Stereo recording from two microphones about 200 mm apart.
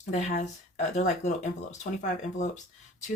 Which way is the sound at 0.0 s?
35° left (ahead or behind).